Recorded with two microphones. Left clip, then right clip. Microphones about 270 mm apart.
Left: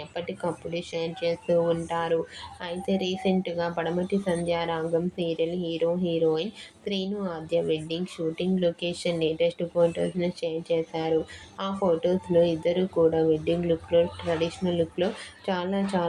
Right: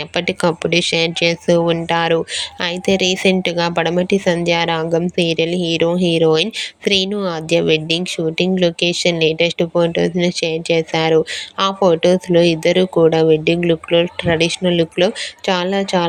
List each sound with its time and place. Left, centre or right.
0.1 s speech: right